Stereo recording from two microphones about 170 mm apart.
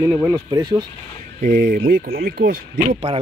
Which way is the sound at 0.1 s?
10° right (ahead or behind).